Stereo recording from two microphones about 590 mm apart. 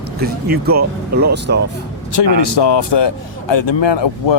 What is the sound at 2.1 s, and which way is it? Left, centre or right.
Speech, left.